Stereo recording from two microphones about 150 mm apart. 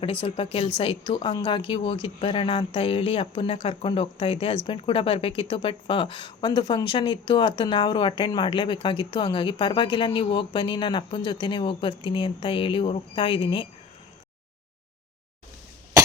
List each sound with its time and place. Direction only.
0.0 s speech: 35° left (ahead or behind)